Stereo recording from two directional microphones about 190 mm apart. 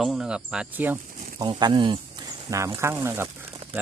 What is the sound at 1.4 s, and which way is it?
Speech, 25° right (ahead or behind).